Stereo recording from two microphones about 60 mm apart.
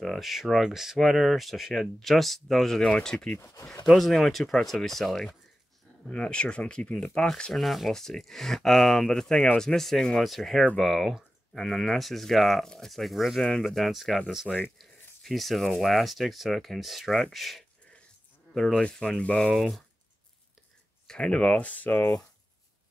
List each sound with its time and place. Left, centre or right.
0.0 s speech: centre
3.3 s speech: left
3.8 s speech: centre
6.0 s speech: centre
7.5 s speech: centre
14.8 s a sound: centre
15.8 s speech: centre
18.5 s speech: centre
19.5 s speech: centre
21.1 s speech: centre
21.4 s speech: left